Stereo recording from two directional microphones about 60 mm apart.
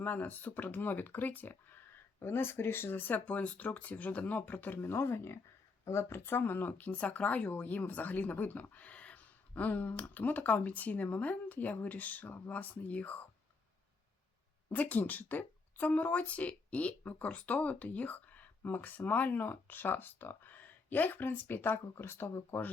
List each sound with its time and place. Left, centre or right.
0.0 s speech: left
4.9 s speech: left
14.7 s speech: left
22.5 s speech: left